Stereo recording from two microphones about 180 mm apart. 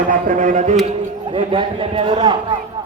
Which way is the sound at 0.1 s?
45° right (ahead or behind).